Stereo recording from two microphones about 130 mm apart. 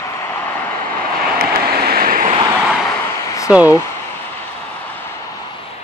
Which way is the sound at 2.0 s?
90° right.